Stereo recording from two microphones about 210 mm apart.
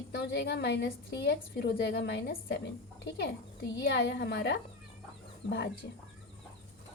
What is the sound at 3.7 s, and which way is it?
Speech, 55° left (ahead or behind).